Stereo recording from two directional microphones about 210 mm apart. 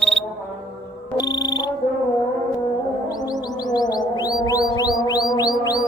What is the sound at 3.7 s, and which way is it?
Music, 20° left (ahead or behind).